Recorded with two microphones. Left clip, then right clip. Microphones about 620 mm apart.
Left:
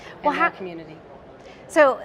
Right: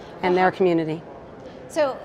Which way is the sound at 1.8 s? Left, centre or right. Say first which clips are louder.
Left 6 dB; left.